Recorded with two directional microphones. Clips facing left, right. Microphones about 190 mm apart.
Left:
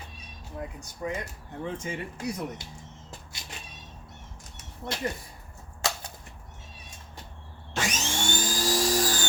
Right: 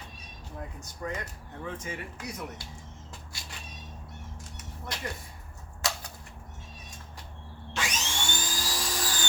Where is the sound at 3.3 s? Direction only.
20° left (ahead or behind).